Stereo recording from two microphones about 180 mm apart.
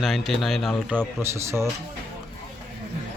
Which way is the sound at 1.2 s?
15° right (ahead or behind).